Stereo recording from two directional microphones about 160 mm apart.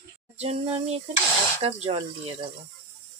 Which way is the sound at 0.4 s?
40° right (ahead or behind).